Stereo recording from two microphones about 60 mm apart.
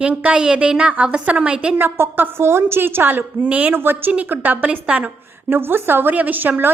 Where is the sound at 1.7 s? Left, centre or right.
Right.